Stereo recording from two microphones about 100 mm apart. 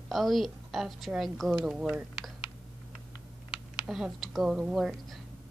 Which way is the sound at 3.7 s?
5° right (ahead or behind).